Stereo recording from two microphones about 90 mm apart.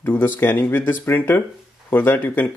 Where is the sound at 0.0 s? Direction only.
20° left (ahead or behind).